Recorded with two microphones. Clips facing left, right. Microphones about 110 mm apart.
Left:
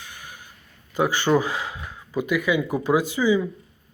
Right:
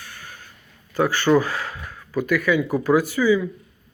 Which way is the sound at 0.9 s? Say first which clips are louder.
Right 2 dB; 15° left (ahead or behind).